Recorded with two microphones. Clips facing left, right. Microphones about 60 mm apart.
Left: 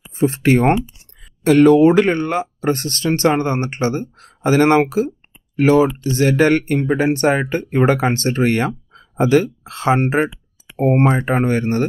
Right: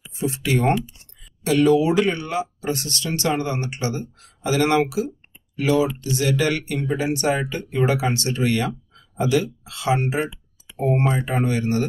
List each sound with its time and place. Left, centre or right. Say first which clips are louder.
0.1 s speech: left 8 dB; left